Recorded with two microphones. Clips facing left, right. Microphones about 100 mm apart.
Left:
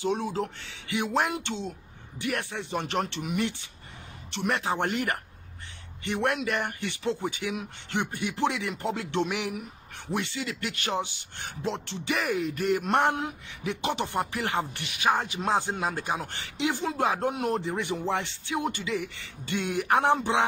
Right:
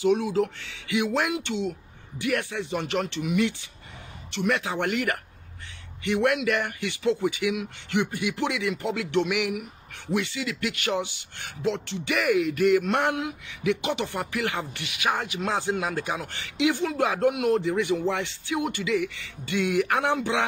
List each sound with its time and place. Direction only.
0.0 s speech: 30° left (ahead or behind)
12.1 s speech: 25° left (ahead or behind)